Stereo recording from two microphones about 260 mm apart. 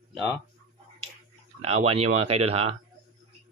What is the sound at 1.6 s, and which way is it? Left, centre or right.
Speech, right.